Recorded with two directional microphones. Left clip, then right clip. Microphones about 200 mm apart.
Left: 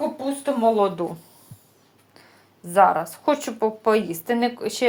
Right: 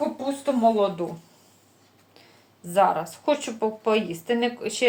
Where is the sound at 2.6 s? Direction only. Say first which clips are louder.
Left 4 dB; 25° left (ahead or behind).